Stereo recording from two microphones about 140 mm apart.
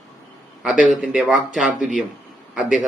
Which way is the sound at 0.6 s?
5° right (ahead or behind).